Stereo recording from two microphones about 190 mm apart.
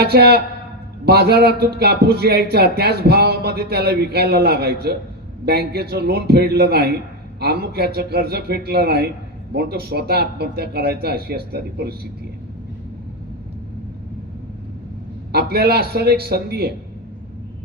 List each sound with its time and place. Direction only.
0.0 s a man's voice: 55° right (ahead or behind)
15.3 s speech: 55° right (ahead or behind)